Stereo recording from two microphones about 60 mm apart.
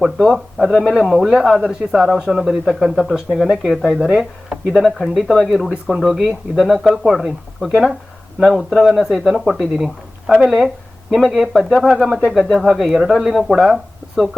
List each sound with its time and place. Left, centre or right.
0.0 s speech: centre
4.6 s speech: centre